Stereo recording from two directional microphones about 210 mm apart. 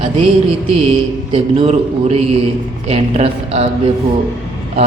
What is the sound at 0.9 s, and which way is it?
Speech, 25° right (ahead or behind).